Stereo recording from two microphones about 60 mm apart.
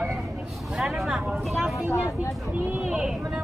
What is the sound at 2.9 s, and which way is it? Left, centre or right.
Speech, centre.